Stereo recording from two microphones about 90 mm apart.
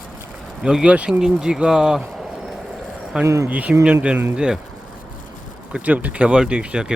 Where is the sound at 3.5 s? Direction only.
15° right (ahead or behind).